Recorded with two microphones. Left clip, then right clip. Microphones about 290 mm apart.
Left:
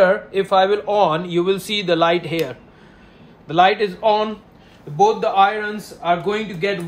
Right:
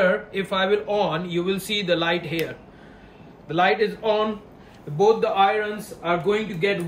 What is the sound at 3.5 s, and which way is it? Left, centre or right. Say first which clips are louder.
Speech: left 5 dB; centre.